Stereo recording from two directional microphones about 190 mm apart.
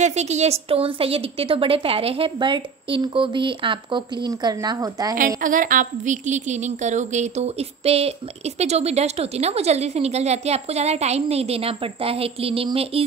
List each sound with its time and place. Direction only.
0.0 s a woman's voice: 35° right (ahead or behind); by 5.1 s 20° right (ahead or behind)
5.4 s a woman's voice: 45° right (ahead or behind)